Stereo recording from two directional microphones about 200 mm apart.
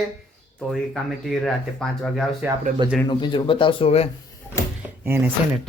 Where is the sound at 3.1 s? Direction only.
25° left (ahead or behind).